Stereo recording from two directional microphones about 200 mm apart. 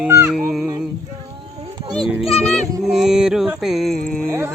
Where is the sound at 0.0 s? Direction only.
10° right (ahead or behind).